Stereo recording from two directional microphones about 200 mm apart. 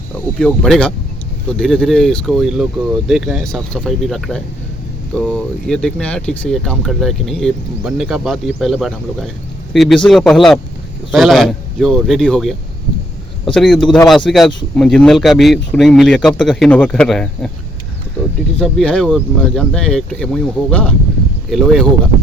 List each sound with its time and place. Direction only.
0.3 s speech: 5° left (ahead or behind)
18.6 s speech: centre (ahead or behind)